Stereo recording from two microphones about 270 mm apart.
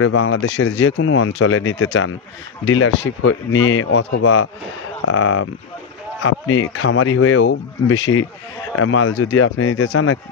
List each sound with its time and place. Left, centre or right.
0.0 s speech: left